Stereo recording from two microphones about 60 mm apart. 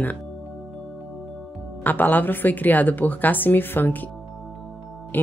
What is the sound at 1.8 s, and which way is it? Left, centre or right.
Speech, left.